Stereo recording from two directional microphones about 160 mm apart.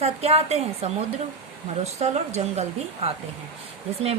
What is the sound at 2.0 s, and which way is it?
Speech, 45° right (ahead or behind).